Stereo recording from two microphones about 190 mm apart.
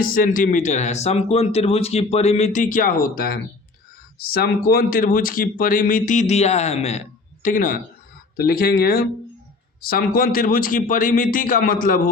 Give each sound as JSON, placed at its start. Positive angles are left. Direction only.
{"t": 0.0, "sound": "speech", "side_deg": 50}